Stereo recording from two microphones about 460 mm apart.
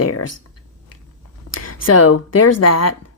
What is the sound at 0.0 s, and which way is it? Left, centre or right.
Speech, left.